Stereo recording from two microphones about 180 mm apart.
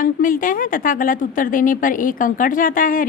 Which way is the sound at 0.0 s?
50° left (ahead or behind).